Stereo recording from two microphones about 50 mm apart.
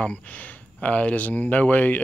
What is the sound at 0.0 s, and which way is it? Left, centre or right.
Speech, left.